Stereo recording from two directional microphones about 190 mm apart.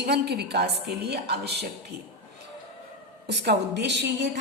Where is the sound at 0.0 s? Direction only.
60° right (ahead or behind).